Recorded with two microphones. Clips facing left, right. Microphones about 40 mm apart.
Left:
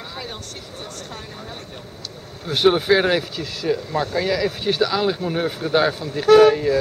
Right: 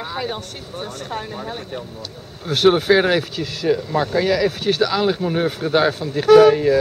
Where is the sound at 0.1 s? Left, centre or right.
Right.